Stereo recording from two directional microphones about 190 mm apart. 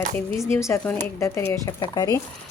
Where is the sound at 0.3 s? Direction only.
15° left (ahead or behind).